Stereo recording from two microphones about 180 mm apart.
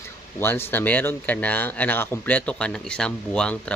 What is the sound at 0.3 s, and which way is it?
Speech, 10° left (ahead or behind).